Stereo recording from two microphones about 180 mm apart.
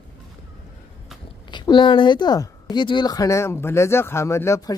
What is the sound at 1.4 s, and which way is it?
Speech, 25° left (ahead or behind).